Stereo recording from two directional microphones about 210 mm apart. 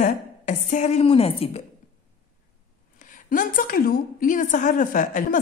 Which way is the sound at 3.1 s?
40° left (ahead or behind).